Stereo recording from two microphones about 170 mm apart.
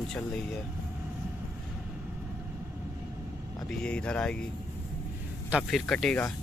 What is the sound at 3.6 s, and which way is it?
Speech, 5° left (ahead or behind).